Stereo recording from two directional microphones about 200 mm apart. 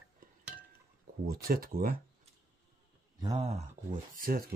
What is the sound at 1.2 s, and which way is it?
Speech, 45° right (ahead or behind).